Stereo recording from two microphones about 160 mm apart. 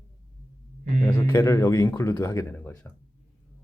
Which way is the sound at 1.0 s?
15° left (ahead or behind).